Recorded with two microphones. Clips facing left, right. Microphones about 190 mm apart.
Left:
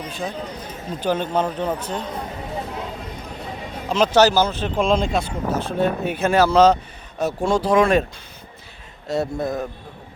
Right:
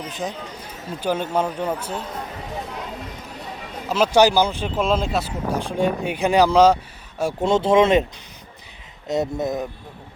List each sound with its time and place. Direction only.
0.1 s speech: 15° right (ahead or behind)
3.8 s speech: 10° right (ahead or behind)
7.5 s speech: 25° right (ahead or behind)
9.0 s speech: 20° right (ahead or behind)